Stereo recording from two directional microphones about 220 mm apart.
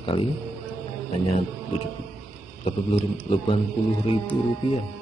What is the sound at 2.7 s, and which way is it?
Speech, 25° left (ahead or behind).